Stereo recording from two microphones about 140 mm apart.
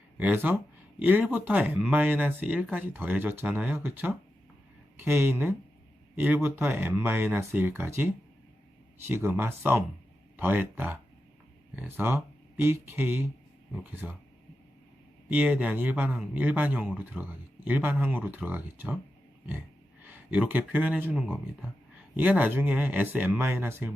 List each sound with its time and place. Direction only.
0.2 s speech: 10° right (ahead or behind)
15.3 s speech: 10° right (ahead or behind)
20.1 s speech: 10° right (ahead or behind)